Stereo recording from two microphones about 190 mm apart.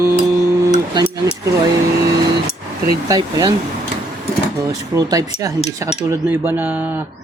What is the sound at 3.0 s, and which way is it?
Speech, 20° right (ahead or behind).